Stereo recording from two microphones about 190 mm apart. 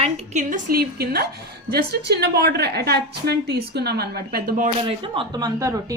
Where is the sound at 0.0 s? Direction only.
35° right (ahead or behind).